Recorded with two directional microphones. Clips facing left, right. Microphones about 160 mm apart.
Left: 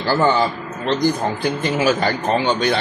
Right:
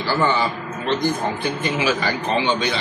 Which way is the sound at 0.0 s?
40° left (ahead or behind).